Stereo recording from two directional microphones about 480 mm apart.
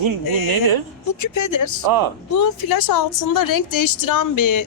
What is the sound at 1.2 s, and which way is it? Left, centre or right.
Speech, left.